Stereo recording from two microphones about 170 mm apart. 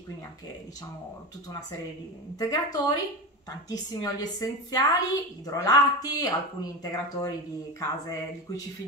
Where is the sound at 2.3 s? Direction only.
20° left (ahead or behind).